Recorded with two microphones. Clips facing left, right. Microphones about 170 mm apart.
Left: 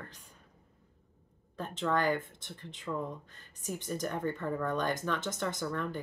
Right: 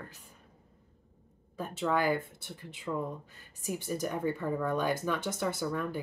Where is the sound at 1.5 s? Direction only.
10° right (ahead or behind).